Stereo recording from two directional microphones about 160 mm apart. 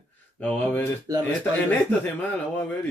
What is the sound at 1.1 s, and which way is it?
Speech, 20° right (ahead or behind).